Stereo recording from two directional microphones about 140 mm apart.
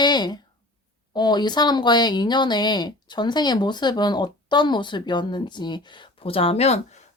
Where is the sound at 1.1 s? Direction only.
30° left (ahead or behind).